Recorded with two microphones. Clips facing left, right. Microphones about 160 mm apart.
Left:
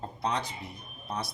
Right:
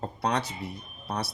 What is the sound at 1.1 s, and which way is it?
Speech, 75° right (ahead or behind).